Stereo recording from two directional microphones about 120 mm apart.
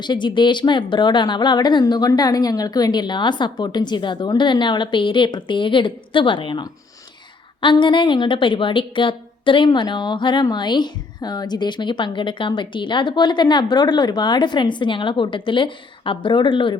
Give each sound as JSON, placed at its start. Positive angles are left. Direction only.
{"t": 0.0, "sound": "a woman's voice", "side_deg": 40}